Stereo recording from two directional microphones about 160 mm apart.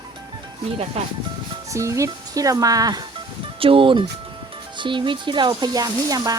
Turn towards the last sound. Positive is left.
turn(degrees=-25)  # may be behind; listen again after turning